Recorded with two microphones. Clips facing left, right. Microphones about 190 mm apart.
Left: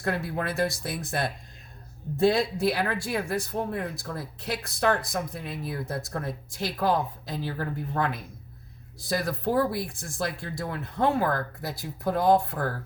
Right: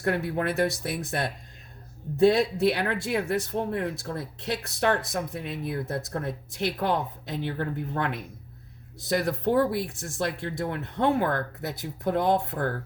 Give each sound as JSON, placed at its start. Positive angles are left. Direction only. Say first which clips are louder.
{"t": 0.0, "sound": "speech", "louder": "right 3 dB", "side_deg": -25}
{"t": 2.1, "sound": "speech", "louder": "right 3 dB", "side_deg": -25}